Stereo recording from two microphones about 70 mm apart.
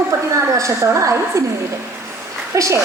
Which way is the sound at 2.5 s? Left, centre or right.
Right.